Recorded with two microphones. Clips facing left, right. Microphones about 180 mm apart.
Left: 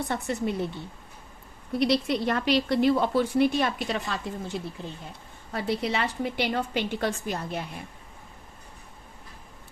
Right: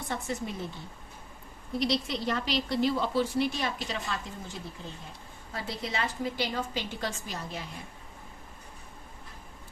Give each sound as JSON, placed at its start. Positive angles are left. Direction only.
{"t": 0.1, "sound": "a woman's voice", "side_deg": 65}
{"t": 1.8, "sound": "a woman's voice", "side_deg": 60}